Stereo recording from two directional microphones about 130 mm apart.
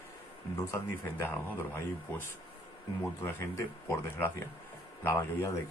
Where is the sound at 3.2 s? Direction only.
20° left (ahead or behind).